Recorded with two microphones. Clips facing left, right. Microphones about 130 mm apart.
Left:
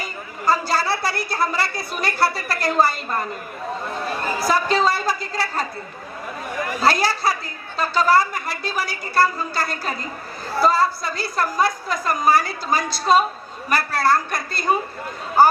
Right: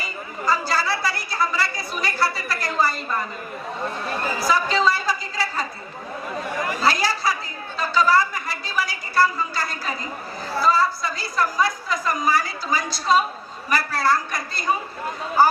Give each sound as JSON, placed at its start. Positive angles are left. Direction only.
{"t": 0.4, "sound": "chatter", "side_deg": 60}
{"t": 1.0, "sound": "a woman's voice", "side_deg": 60}
{"t": 4.4, "sound": "a woman's voice", "side_deg": 60}
{"t": 6.8, "sound": "a woman's voice", "side_deg": 60}